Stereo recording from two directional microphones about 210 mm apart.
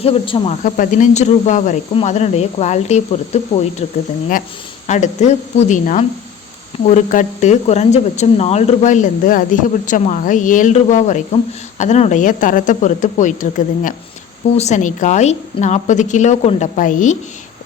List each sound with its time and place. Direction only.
0.0 s speech: 25° left (ahead or behind)
4.9 s speech: 35° left (ahead or behind)